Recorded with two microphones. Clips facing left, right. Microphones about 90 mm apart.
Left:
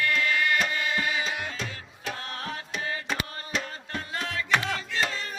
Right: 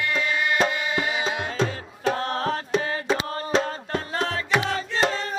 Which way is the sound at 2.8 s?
30° right (ahead or behind).